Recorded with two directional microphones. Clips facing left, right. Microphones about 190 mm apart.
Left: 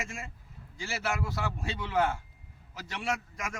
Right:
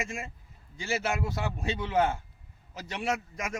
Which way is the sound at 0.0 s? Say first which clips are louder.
Right 4 dB; 20° right (ahead or behind).